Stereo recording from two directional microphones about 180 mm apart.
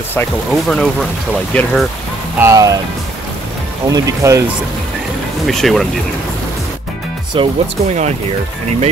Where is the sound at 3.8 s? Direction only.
15° right (ahead or behind).